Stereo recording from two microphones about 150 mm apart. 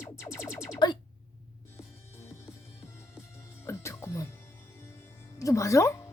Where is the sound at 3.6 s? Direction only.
15° left (ahead or behind).